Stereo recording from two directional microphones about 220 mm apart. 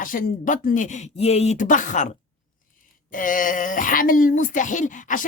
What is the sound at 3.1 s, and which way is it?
Speech, 40° left (ahead or behind).